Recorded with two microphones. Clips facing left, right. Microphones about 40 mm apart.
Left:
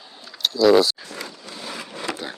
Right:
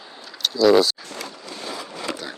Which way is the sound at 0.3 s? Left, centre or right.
Centre.